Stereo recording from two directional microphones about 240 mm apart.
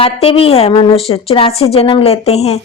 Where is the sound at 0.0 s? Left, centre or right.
Left.